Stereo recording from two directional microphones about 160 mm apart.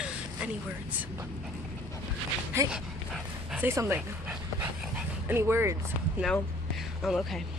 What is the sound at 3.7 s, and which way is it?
Speech, 15° right (ahead or behind).